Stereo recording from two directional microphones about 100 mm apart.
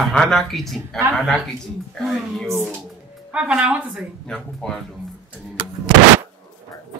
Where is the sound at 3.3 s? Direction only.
10° right (ahead or behind).